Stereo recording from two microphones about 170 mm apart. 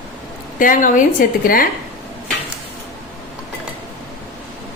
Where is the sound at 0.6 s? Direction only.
50° left (ahead or behind).